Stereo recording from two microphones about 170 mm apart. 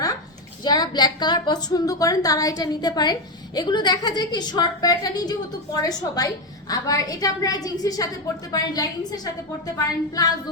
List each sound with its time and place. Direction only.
0.6 s a woman's voice: 25° left (ahead or behind)